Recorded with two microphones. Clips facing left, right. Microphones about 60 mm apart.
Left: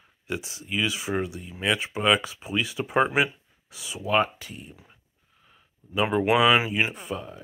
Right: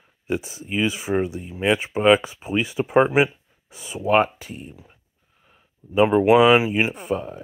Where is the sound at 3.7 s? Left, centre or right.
Right.